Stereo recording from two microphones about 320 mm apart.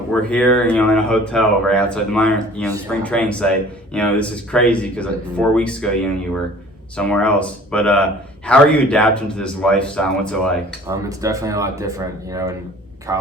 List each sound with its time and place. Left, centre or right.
0.1 s speech: centre
10.8 s speech: centre